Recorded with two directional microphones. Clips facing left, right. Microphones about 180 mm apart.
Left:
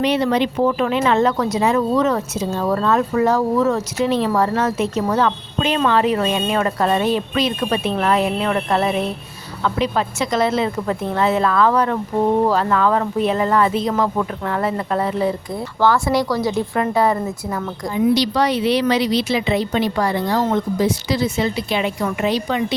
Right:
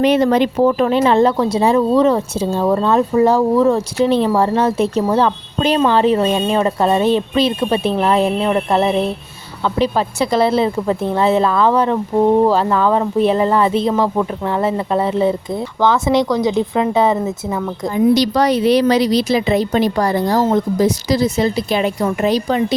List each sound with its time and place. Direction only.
0.0 s speech: 45° right (ahead or behind); by 17.9 s 20° right (ahead or behind)
17.9 s speech: 45° right (ahead or behind)